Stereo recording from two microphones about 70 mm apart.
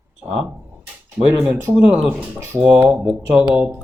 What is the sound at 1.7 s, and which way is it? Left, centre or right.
Speech, centre.